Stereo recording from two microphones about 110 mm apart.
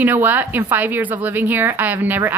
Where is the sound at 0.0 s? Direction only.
15° right (ahead or behind).